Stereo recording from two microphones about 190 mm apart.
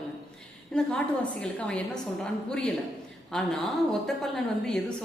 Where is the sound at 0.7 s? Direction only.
Centre (ahead or behind).